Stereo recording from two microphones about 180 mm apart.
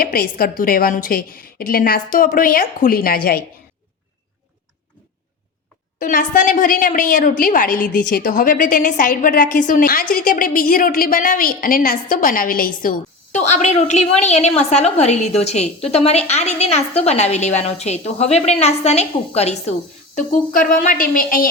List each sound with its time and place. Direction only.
0.0 s a woman's voice: 55° left (ahead or behind)
6.0 s a woman's voice: 50° left (ahead or behind)
20.1 s a woman's voice: 50° left (ahead or behind)